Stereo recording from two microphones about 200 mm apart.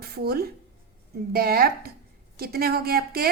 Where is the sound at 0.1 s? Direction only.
50° right (ahead or behind).